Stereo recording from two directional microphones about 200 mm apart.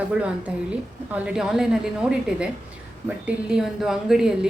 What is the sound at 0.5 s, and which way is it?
A woman's voice, 5° right (ahead or behind).